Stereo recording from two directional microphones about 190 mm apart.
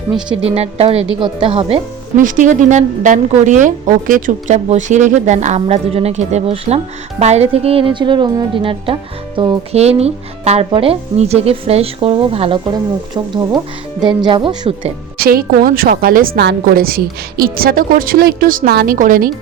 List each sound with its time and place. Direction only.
0.4 s speech: 30° right (ahead or behind)
2.1 s speech: 45° right (ahead or behind)
14.0 s speech: 25° right (ahead or behind)
15.2 s a woman's voice: 50° right (ahead or behind)